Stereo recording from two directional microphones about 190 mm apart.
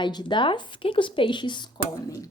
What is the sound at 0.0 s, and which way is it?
Speech, 25° left (ahead or behind).